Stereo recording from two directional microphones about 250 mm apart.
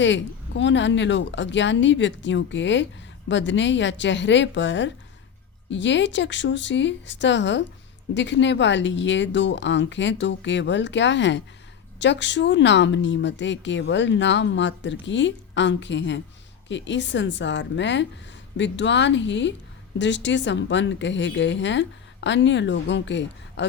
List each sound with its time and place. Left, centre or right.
0.0 s speech: left